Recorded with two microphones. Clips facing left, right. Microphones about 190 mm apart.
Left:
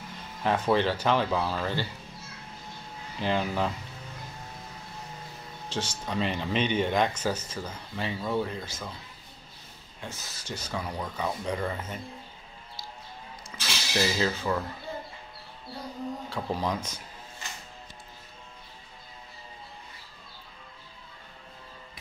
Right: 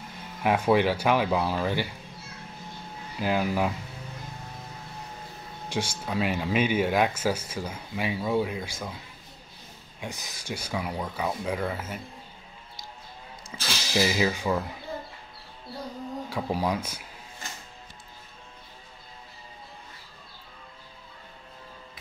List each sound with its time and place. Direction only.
0.4 s speech: 10° right (ahead or behind)
3.2 s speech: 5° right (ahead or behind)
5.7 s speech: 10° right (ahead or behind)
9.9 s speech: 15° right (ahead or behind)
13.5 s speech: 20° right (ahead or behind)
16.3 s speech: 10° right (ahead or behind)